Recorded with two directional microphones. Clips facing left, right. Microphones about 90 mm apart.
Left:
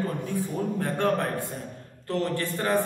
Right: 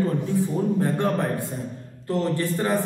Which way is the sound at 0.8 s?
20° right (ahead or behind).